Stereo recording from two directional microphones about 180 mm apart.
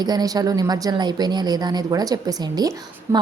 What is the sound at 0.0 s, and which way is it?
Speech, 20° right (ahead or behind).